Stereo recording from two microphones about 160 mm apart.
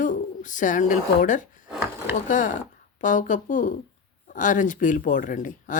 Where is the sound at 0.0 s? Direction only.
55° left (ahead or behind).